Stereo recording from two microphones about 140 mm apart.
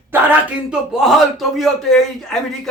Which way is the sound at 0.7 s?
5° right (ahead or behind).